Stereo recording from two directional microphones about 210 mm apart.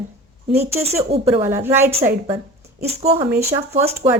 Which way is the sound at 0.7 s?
30° right (ahead or behind).